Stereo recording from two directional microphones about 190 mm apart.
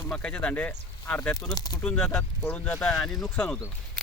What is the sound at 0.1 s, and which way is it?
Speech, 5° left (ahead or behind).